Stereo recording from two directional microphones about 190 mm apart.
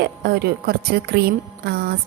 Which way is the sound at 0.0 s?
55° right (ahead or behind).